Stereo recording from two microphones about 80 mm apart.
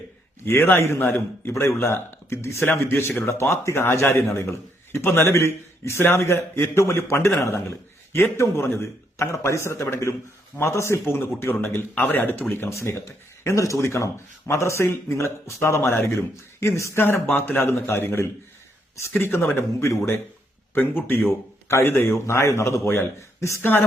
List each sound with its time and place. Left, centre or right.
0.4 s speech: left
20.7 s speech: left